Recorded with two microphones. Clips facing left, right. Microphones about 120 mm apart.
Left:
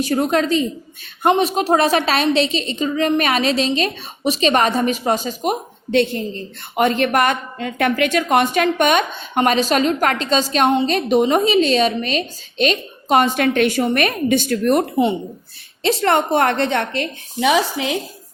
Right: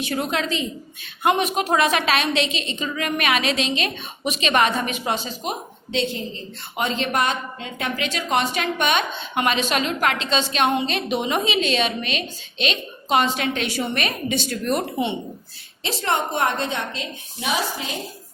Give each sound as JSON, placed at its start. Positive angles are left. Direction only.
{"t": 0.0, "sound": "a woman's voice", "side_deg": 40}
{"t": 15.8, "sound": "a woman's voice", "side_deg": 65}